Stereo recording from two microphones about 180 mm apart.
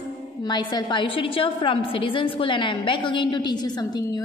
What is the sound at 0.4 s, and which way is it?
A woman's voice, 25° left (ahead or behind).